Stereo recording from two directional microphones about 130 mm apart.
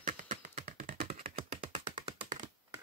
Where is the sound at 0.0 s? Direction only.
80° right; by 2.1 s 50° right (ahead or behind).